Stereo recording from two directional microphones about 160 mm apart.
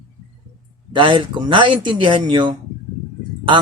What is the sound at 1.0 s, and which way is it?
Speech, 30° right (ahead or behind).